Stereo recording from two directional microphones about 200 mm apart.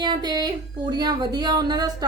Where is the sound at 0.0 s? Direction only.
20° right (ahead or behind).